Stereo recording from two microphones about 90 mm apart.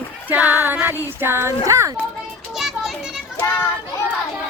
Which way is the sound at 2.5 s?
5° right (ahead or behind).